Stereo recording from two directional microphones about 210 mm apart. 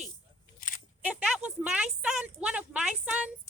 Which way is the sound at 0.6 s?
40° left (ahead or behind).